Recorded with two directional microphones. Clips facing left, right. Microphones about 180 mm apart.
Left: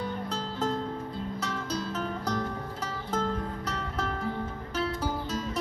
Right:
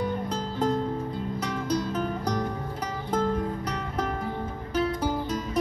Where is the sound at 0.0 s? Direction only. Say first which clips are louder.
Right 4 dB; 15° right (ahead or behind).